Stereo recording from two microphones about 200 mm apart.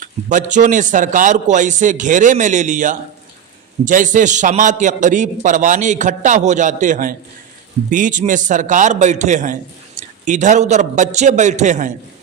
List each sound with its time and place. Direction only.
0.0 s a man's voice: 40° right (ahead or behind)